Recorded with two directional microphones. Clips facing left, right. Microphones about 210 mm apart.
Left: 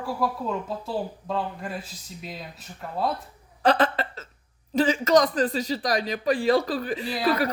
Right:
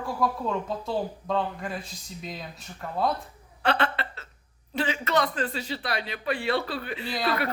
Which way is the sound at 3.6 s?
35° left (ahead or behind).